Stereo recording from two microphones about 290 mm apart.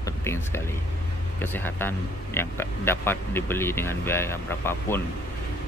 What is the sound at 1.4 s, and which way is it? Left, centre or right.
Speech, centre.